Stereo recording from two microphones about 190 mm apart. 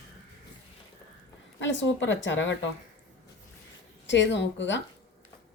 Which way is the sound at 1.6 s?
75° left (ahead or behind).